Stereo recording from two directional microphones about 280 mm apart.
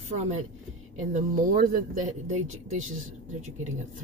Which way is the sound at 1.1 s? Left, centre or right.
Right.